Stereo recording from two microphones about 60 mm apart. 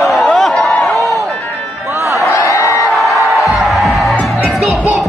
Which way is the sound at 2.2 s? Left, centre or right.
Left.